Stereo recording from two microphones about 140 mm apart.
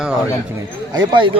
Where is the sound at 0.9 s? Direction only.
35° right (ahead or behind).